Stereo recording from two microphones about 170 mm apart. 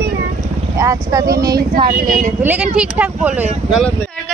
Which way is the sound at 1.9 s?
55° right (ahead or behind).